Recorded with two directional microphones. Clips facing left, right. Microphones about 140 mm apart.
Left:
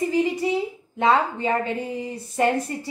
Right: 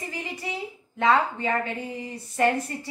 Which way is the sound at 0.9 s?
25° left (ahead or behind).